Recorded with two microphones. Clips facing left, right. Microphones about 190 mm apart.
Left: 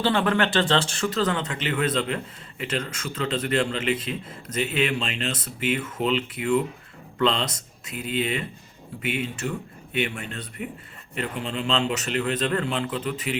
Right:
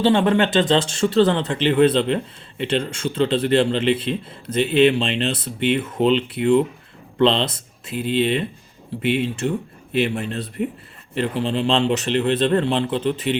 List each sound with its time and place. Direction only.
0.0 s speech: 20° right (ahead or behind)